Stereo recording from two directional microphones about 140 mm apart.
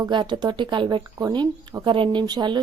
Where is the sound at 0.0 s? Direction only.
35° right (ahead or behind).